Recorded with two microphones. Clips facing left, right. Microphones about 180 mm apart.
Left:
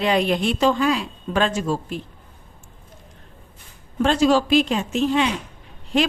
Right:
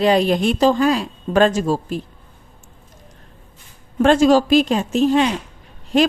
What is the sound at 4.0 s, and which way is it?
A woman's voice, 50° right (ahead or behind).